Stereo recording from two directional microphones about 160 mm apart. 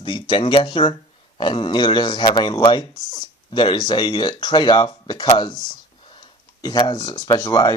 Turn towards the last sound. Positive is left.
turn(degrees=25)  # may be behind; listen again after turning